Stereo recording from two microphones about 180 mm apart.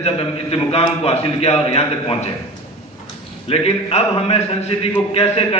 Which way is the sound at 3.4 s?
35° left (ahead or behind).